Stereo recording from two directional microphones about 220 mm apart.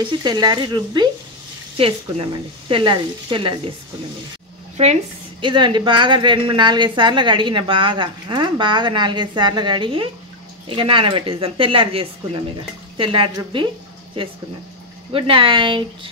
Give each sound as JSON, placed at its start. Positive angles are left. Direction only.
{"t": 0.2, "sound": "a woman's voice", "side_deg": -20}
{"t": 4.8, "sound": "a woman's voice", "side_deg": -30}
{"t": 15.1, "sound": "a woman's voice", "side_deg": -25}